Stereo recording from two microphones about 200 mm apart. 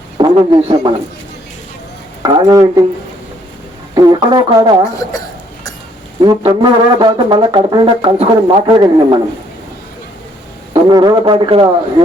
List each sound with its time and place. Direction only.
0.2 s a man's voice: 25° right (ahead or behind)
2.2 s speech: 20° right (ahead or behind)
3.9 s speech: 20° right (ahead or behind)
6.2 s speech: 20° right (ahead or behind)
10.8 s speech: 20° right (ahead or behind)